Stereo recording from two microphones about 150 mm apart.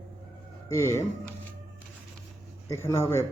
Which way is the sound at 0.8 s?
20° left (ahead or behind).